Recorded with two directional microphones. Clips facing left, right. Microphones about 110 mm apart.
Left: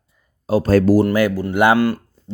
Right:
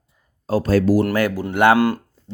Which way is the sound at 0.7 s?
50° left (ahead or behind).